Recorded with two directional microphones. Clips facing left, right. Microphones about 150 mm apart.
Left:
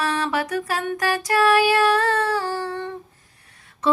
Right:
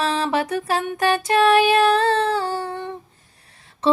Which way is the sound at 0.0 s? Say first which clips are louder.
Right 2 dB; 25° right (ahead or behind).